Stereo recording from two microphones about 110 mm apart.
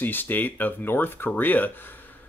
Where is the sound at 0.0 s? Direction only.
15° left (ahead or behind).